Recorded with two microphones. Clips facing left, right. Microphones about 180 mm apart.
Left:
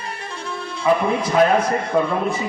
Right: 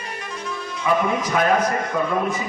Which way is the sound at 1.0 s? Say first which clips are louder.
Left 4 dB; 30° left (ahead or behind).